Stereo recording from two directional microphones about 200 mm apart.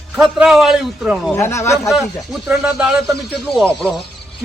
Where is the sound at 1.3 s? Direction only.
15° left (ahead or behind).